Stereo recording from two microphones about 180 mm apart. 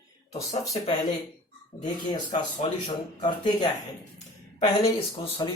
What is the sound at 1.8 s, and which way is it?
Speech, 25° left (ahead or behind).